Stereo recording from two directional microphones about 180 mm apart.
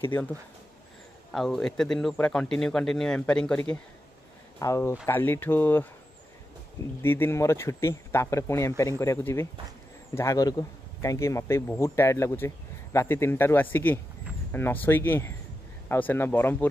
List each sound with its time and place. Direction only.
0.0 s speech: 10° left (ahead or behind)
1.3 s speech: centre (ahead or behind)
4.6 s speech: 15° left (ahead or behind)
7.0 s speech: 10° left (ahead or behind)